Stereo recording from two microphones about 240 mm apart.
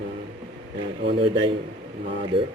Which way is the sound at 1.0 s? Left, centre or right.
Right.